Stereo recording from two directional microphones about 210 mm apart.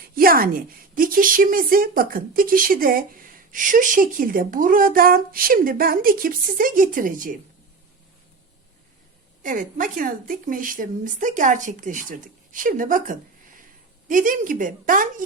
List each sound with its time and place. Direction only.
0.1 s a woman's voice: 45° right (ahead or behind)
9.4 s a woman's voice: 40° right (ahead or behind)